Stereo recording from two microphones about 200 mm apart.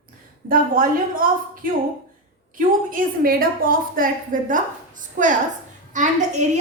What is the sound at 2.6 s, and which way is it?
A woman's voice, 45° right (ahead or behind).